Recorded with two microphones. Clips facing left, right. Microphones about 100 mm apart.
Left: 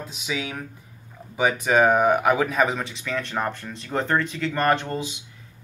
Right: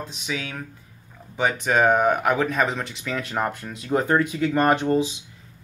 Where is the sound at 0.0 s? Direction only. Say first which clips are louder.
Left 1 dB; 5° left (ahead or behind); by 5.1 s 20° right (ahead or behind).